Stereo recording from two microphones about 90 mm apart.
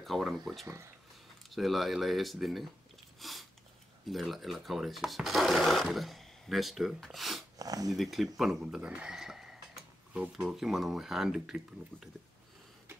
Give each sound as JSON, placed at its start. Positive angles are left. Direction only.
{"t": 0.0, "sound": "speech", "side_deg": 0}
{"t": 1.5, "sound": "speech", "side_deg": 0}
{"t": 3.2, "sound": "a sound", "side_deg": 0}
{"t": 4.1, "sound": "speech", "side_deg": 0}
{"t": 7.5, "sound": "speech", "side_deg": -45}
{"t": 7.9, "sound": "speech", "side_deg": 0}